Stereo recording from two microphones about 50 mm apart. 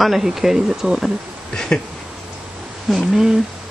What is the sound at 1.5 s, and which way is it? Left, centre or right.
Speech, centre.